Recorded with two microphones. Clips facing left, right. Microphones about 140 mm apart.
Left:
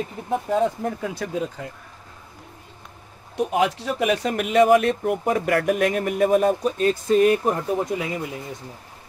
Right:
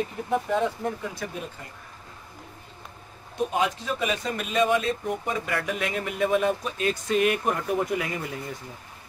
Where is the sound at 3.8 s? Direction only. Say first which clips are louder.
Left 6 dB; 75° left (ahead or behind); by 8.2 s 20° left (ahead or behind).